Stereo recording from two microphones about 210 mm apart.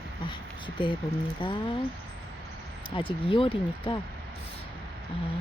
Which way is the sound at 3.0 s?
25° left (ahead or behind).